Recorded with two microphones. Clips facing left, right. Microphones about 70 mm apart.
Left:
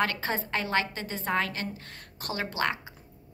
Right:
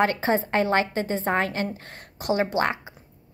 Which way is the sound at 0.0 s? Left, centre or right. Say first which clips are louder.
Right 7 dB; right.